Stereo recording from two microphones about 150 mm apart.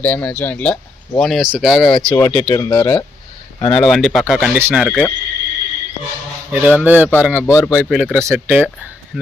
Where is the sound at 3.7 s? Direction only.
Centre (ahead or behind).